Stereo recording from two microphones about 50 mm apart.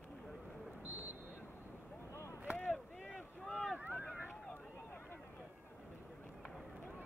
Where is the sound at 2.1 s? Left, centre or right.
Left.